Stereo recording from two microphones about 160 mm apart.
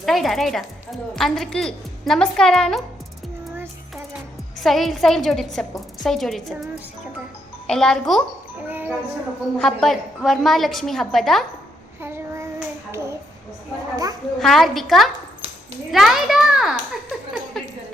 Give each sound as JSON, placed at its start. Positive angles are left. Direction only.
{"t": 0.0, "sound": "a woman's voice", "side_deg": 0}
{"t": 4.5, "sound": "a woman's voice", "side_deg": 0}
{"t": 7.7, "sound": "a woman's voice", "side_deg": 5}
{"t": 9.6, "sound": "a woman's voice", "side_deg": 0}
{"t": 11.9, "sound": "child singing", "side_deg": -15}
{"t": 13.9, "sound": "a child's voice", "side_deg": -20}
{"t": 14.3, "sound": "a woman's voice", "side_deg": 0}